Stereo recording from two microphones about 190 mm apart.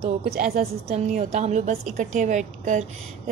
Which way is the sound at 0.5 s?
35° right (ahead or behind).